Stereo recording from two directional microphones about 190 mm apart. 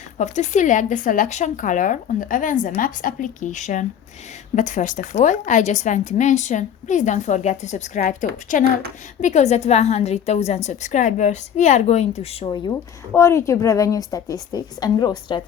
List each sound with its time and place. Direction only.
0.2 s a woman's voice: 40° left (ahead or behind); by 12.7 s 25° left (ahead or behind)
13.1 s a woman's voice: 15° left (ahead or behind)